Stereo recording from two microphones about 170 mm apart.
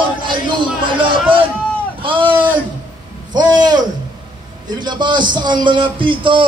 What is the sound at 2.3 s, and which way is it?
Speech, 10° right (ahead or behind).